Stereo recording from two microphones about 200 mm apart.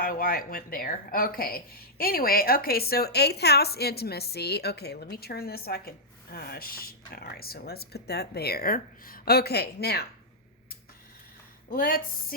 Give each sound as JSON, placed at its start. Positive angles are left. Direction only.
{"t": 0.0, "sound": "speech", "side_deg": 45}
{"t": 11.7, "sound": "speech", "side_deg": 45}